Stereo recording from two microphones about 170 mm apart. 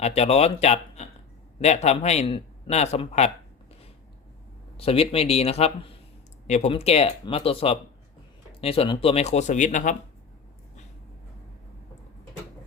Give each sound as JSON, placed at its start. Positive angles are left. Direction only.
{"t": 0.0, "sound": "a man's voice", "side_deg": 40}
{"t": 4.8, "sound": "speech", "side_deg": 35}